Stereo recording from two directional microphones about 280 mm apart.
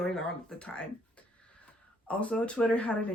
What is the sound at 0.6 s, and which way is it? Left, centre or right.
Speech, centre.